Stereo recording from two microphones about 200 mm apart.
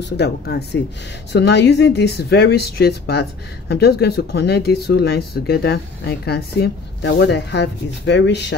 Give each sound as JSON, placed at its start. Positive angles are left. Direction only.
{"t": 0.0, "sound": "a woman's voice", "side_deg": 55}